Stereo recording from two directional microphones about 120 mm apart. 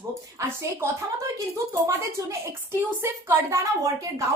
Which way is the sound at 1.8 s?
20° right (ahead or behind).